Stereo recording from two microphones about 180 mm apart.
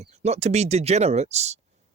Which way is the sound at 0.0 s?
35° right (ahead or behind).